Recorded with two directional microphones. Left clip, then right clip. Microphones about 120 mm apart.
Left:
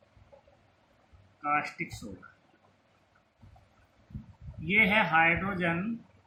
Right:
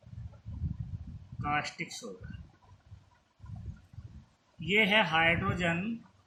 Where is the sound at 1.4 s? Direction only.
70° right (ahead or behind).